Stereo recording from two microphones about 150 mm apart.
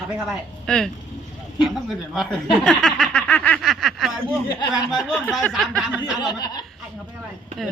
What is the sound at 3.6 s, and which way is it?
Speech, centre (ahead or behind).